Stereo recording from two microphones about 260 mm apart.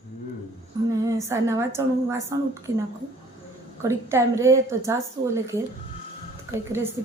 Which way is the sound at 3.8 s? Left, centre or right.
Centre.